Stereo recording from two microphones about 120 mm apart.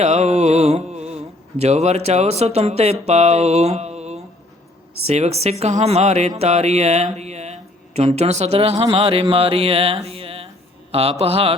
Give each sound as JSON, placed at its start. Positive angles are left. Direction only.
{"t": 0.0, "sound": "speech", "side_deg": -65}